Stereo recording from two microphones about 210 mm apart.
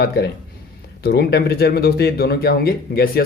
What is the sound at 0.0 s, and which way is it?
Speech, 50° left (ahead or behind).